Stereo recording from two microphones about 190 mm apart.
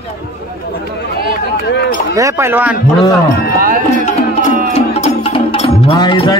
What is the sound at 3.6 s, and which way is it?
Speech, 45° right (ahead or behind).